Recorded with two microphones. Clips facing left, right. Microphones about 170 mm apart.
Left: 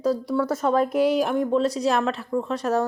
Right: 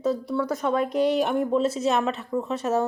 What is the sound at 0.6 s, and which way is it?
Speech, 35° left (ahead or behind).